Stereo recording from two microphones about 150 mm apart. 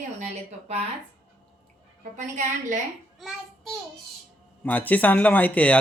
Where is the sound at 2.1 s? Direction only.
55° right (ahead or behind).